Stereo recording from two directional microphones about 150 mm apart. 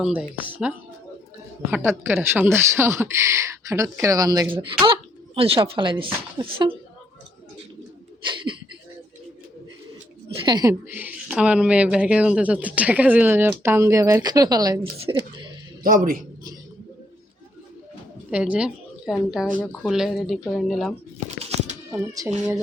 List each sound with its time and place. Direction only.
0.0 s speech: 10° right (ahead or behind)
1.7 s speech: 15° right (ahead or behind)
4.5 s speech: 35° right (ahead or behind)
8.2 s speech: 30° right (ahead or behind)
10.3 s speech: 30° right (ahead or behind)
10.8 s speech: 10° right (ahead or behind)
14.9 s speech: 40° right (ahead or behind)
15.8 s a man's voice: 70° right (ahead or behind)
18.3 s a woman's voice: 10° right (ahead or behind)
19.5 s speech: 10° left (ahead or behind)
19.9 s speech: centre (ahead or behind)
21.2 s a sound: 50° right (ahead or behind)